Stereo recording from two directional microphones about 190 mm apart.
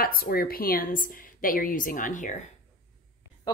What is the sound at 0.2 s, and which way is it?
A woman's voice, 50° left (ahead or behind).